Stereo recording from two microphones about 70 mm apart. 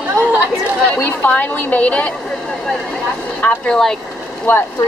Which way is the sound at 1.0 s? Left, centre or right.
Left.